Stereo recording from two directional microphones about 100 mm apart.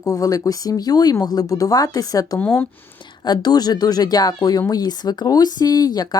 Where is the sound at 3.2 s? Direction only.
45° left (ahead or behind).